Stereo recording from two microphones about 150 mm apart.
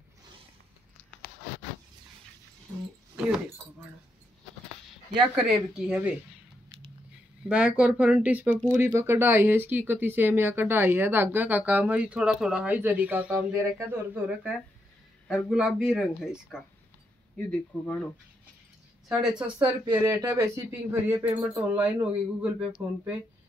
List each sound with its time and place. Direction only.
5.3 s speech: centre (ahead or behind)
7.4 s speech: 5° right (ahead or behind); by 18.0 s 10° left (ahead or behind)
19.0 s speech: 5° right (ahead or behind)
20.1 s speech: 20° right (ahead or behind)